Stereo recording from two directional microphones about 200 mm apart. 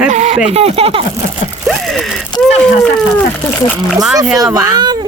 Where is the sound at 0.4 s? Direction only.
30° right (ahead or behind).